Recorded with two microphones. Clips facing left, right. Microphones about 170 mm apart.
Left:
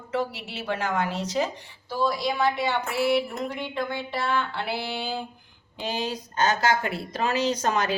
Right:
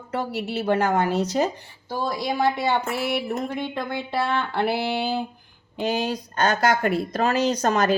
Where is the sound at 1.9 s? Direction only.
55° right (ahead or behind).